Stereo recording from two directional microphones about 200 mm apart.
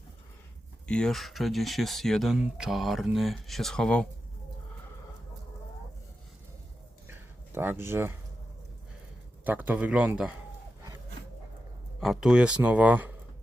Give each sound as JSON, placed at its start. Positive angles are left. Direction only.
{"t": 0.9, "sound": "speech", "side_deg": 5}
{"t": 7.1, "sound": "a sound", "side_deg": -10}
{"t": 9.4, "sound": "a man's voice", "side_deg": -10}
{"t": 11.9, "sound": "speech", "side_deg": 0}